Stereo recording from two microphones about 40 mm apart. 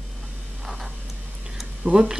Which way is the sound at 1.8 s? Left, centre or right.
Right.